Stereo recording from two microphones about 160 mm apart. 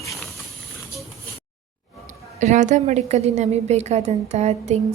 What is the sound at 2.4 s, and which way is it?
A woman's voice, 50° right (ahead or behind).